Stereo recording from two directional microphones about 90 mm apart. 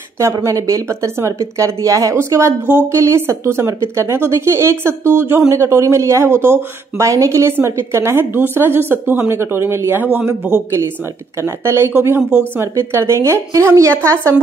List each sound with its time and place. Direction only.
0.2 s a woman's voice: 35° right (ahead or behind)